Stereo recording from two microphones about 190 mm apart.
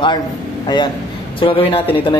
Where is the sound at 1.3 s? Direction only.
30° left (ahead or behind).